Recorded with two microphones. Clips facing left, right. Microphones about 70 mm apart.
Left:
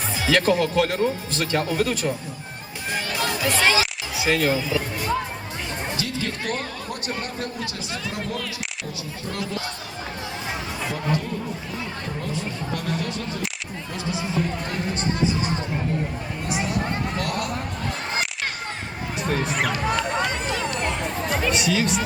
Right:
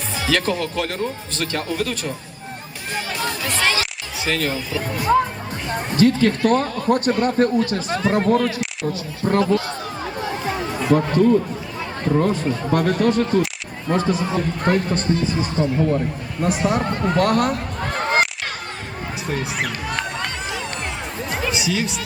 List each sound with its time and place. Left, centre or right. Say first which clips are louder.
0.3 s speech: left 2 dB; centre
3.2 s a sound: left 2 dB; centre
5.7 s a man's voice: right 13 dB; right
10.2 s chatter: right 9 dB; right
10.9 s a man's voice: right 13 dB; right
16.4 s a man's voice: right 7 dB; right
17.9 s crowd: right 10 dB; right
19.3 s speech: left 1 dB; centre
21.2 s speech: even; centre